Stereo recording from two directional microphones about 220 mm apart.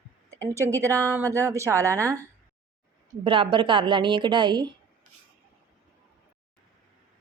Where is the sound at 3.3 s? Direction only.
20° right (ahead or behind).